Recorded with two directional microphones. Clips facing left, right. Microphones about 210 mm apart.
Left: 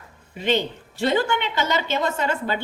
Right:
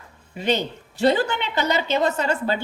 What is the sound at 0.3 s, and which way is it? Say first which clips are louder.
Speech: left 1 dB; 40° right (ahead or behind).